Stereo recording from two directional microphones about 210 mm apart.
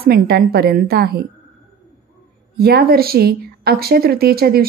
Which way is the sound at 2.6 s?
45° right (ahead or behind).